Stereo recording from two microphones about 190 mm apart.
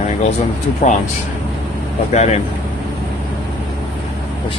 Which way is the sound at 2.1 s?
35° left (ahead or behind).